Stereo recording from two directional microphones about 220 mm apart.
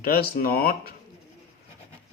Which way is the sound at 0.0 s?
45° left (ahead or behind).